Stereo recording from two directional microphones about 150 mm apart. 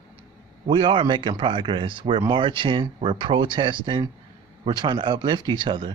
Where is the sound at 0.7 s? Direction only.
35° right (ahead or behind).